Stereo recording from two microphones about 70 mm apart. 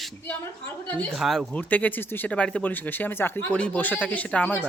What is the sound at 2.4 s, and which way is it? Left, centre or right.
Speech, centre.